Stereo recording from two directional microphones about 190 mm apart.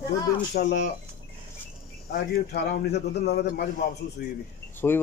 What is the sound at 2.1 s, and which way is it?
A man's voice, 60° left (ahead or behind).